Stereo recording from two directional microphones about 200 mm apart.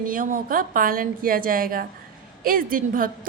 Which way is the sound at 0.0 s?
45° right (ahead or behind).